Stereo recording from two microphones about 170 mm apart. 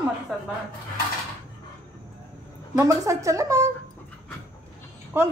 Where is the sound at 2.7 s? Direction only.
20° right (ahead or behind).